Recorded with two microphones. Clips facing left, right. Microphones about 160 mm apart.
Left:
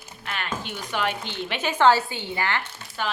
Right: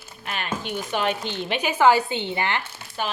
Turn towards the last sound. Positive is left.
turn(degrees=-20)  # may be behind; listen again after turning